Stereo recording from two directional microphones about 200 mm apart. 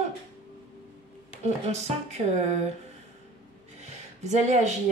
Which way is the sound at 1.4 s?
35° right (ahead or behind).